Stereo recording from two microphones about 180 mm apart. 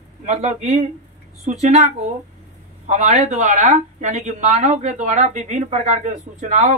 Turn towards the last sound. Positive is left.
turn(degrees=-40)  # may be behind; listen again after turning